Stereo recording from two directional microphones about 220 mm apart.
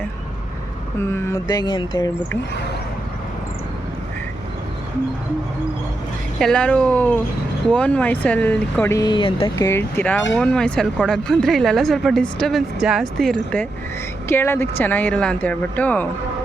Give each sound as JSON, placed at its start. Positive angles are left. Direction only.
{"t": 1.1, "sound": "mantra", "side_deg": 15}
{"t": 6.4, "sound": "speech", "side_deg": 5}
{"t": 9.6, "sound": "speech", "side_deg": 10}